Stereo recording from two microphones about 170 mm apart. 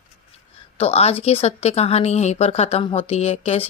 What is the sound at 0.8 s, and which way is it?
Speech, 35° left (ahead or behind).